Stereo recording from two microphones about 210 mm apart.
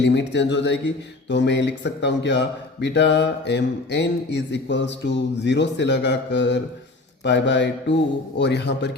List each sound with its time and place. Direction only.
0.0 s speech: 55° left (ahead or behind)